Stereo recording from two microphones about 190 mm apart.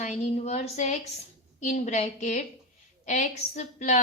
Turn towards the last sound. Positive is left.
turn(degrees=40)  # may be behind; listen again after turning